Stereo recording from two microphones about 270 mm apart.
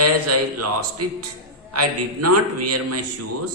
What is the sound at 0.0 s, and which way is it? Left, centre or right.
A man's voice, right.